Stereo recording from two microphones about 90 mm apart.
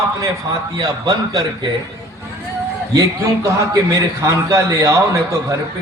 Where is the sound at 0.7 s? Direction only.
50° right (ahead or behind).